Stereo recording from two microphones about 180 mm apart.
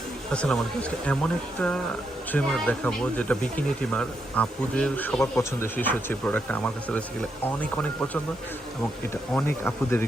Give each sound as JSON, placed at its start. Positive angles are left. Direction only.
{"t": 0.3, "sound": "speech", "side_deg": 5}
{"t": 9.3, "sound": "speech", "side_deg": 10}